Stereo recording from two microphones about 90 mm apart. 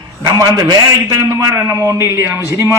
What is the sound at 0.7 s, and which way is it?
A man's voice, 40° right (ahead or behind).